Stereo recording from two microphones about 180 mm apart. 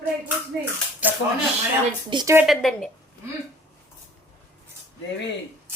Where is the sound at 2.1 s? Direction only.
25° right (ahead or behind).